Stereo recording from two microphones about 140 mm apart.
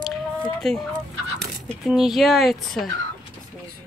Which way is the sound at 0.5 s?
Centre (ahead or behind).